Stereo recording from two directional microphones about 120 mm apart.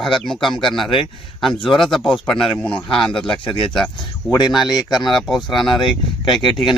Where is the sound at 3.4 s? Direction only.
45° left (ahead or behind).